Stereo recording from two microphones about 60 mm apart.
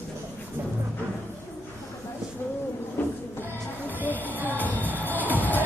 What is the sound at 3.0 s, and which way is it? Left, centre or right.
Music, left.